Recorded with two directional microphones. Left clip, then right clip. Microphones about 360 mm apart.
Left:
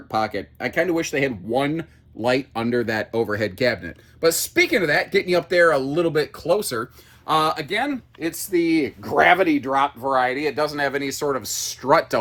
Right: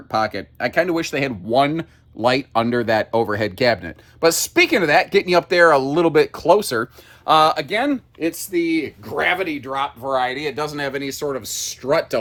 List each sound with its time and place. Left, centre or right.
0.1 s speech: centre